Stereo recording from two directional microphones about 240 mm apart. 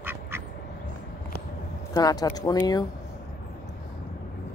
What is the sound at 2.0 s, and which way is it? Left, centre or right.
Speech, centre.